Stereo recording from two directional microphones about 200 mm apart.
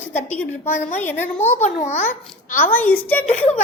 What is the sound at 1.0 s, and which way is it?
Speech, 10° left (ahead or behind).